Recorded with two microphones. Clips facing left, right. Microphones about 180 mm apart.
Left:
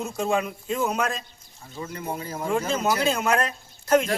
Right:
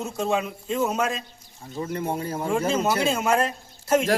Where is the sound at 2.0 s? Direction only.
30° right (ahead or behind).